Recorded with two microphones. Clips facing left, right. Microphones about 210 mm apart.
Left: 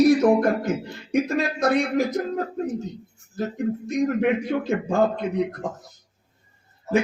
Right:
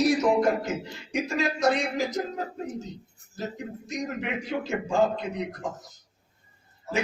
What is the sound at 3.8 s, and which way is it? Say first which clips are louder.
A man's voice: left 10 dB; 55° left (ahead or behind).